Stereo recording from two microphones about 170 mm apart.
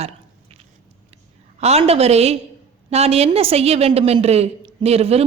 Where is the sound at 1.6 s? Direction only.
40° right (ahead or behind).